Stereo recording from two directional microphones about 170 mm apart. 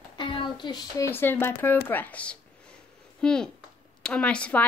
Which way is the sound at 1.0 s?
15° left (ahead or behind).